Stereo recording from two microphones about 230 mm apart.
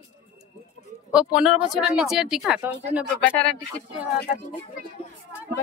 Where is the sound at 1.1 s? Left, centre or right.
Centre.